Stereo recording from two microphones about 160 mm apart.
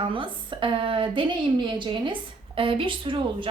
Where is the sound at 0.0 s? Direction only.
30° right (ahead or behind).